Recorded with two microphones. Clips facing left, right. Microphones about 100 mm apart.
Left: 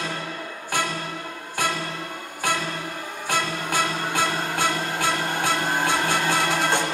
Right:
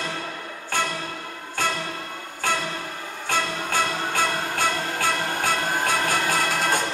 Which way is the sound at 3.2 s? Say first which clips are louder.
Even; 15° left (ahead or behind).